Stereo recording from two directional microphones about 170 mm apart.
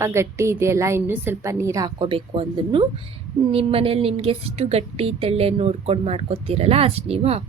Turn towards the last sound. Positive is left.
turn(degrees=-35)  # may be behind; listen again after turning